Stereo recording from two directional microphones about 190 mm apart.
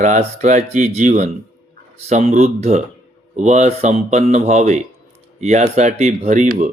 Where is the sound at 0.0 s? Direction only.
40° right (ahead or behind).